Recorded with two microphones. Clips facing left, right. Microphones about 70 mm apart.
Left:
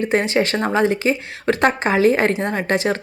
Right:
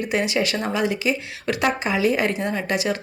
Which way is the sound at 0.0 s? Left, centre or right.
Left.